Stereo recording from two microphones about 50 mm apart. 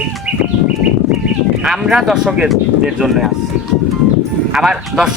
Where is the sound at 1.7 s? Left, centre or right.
Centre.